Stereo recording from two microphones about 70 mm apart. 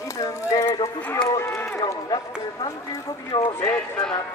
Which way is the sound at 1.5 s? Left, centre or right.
Left.